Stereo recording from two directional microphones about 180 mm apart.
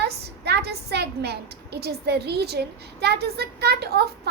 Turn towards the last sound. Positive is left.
turn(degrees=-65)  # may be behind; listen again after turning